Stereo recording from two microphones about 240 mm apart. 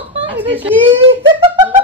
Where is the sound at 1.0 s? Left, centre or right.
Right.